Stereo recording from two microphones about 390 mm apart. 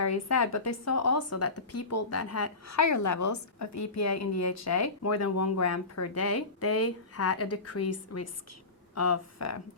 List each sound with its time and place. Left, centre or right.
0.0 s speech: left